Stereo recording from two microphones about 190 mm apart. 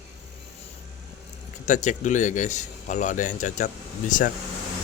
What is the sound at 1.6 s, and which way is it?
Speech, 40° left (ahead or behind).